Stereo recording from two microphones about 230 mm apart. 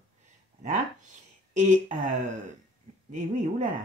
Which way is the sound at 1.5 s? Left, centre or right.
Right.